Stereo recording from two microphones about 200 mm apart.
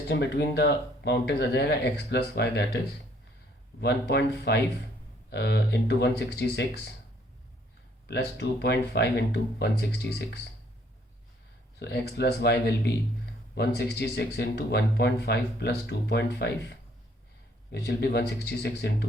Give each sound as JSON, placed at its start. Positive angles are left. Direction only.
{"t": 0.1, "sound": "speech", "side_deg": 60}
{"t": 3.8, "sound": "speech", "side_deg": 55}
{"t": 8.0, "sound": "speech", "side_deg": 55}
{"t": 11.8, "sound": "speech", "side_deg": 55}